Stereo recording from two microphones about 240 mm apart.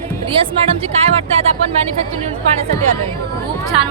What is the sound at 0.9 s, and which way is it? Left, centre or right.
Speech, right.